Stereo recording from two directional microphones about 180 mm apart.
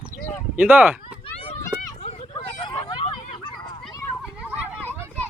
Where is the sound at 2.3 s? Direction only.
25° left (ahead or behind).